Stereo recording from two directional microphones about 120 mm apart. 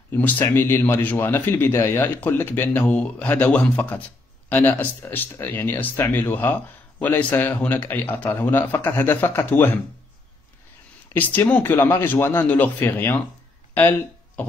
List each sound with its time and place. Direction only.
0.1 s speech: 15° left (ahead or behind)
11.1 s speech: 15° left (ahead or behind)